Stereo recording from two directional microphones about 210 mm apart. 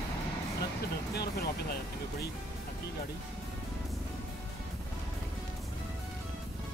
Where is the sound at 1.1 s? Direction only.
50° left (ahead or behind).